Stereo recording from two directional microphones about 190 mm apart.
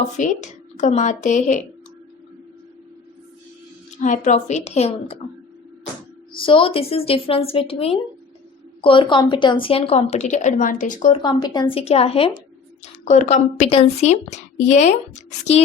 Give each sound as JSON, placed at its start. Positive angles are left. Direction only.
{"t": 0.2, "sound": "a woman's voice", "side_deg": 40}
{"t": 4.0, "sound": "a woman's voice", "side_deg": 40}
{"t": 6.4, "sound": "a woman's voice", "side_deg": 30}
{"t": 11.2, "sound": "a woman's voice", "side_deg": 25}